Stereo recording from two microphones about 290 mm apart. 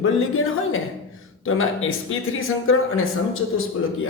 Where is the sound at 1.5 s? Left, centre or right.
Left.